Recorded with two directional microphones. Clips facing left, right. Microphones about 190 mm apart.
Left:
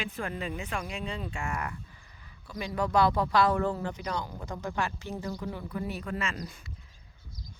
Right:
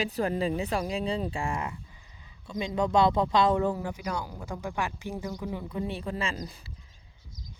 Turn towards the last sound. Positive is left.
turn(degrees=-35)  # may be behind; listen again after turning